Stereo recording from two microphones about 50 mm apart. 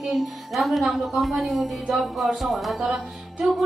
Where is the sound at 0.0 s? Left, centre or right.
Centre.